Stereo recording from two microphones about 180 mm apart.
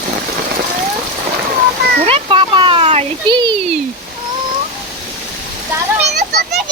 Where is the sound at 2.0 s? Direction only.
30° right (ahead or behind).